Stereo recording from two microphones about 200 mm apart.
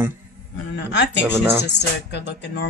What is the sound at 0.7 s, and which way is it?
Speech, 60° left (ahead or behind).